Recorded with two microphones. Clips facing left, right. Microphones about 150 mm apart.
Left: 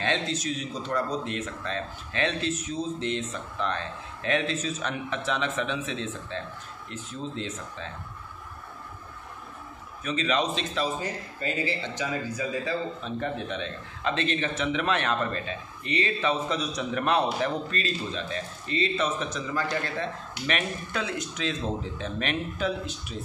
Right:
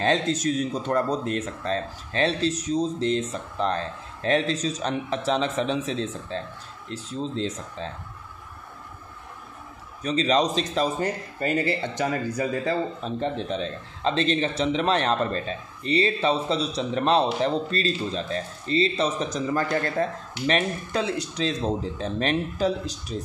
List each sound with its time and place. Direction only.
0.0 s a man's voice: 45° right (ahead or behind)
10.0 s a man's voice: 35° right (ahead or behind)
11.0 s speech: 55° right (ahead or behind)
13.2 s a man's voice: 30° right (ahead or behind)